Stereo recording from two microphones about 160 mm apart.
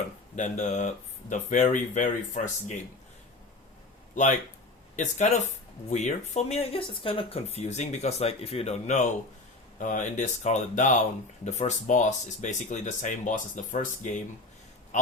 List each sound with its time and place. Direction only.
0.3 s speech: 50° left (ahead or behind)
4.1 s speech: 50° left (ahead or behind)
9.7 s speech: 55° left (ahead or behind)